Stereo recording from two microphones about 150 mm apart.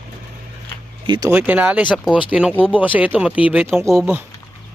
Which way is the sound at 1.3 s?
10° right (ahead or behind).